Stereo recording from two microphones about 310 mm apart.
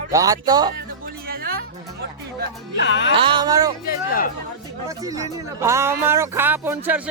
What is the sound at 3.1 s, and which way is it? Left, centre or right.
Speech, centre.